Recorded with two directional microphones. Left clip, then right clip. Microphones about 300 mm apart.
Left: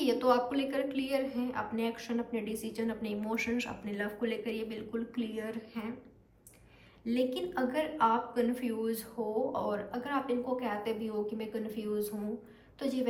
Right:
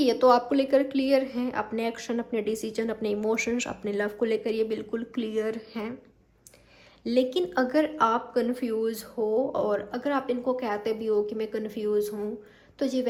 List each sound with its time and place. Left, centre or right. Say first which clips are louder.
0.0 s a woman's voice: right 7 dB; centre
7.0 s a woman's voice: right 8 dB; centre